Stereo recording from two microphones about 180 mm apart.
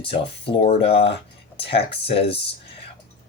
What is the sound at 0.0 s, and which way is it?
Speech, 30° left (ahead or behind).